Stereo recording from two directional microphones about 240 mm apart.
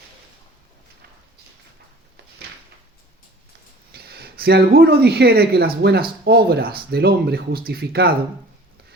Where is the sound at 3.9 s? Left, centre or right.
Right.